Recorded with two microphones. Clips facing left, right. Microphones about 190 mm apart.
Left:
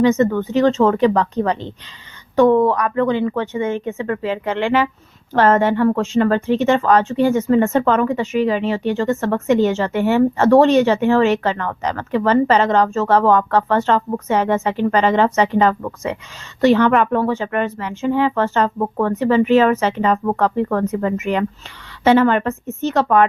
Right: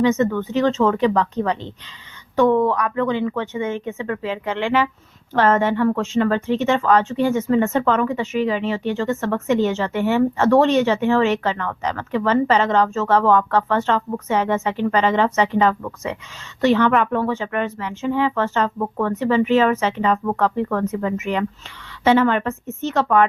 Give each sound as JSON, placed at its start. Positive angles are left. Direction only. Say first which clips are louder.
{"t": 0.0, "sound": "speech", "louder": "left 3 dB", "side_deg": 45}